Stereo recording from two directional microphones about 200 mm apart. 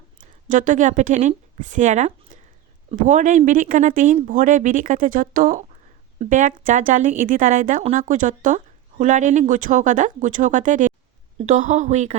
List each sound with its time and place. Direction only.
0.2 s a woman's voice: 40° right (ahead or behind)